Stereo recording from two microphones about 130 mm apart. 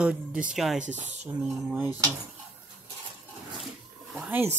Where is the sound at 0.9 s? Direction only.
65° right (ahead or behind).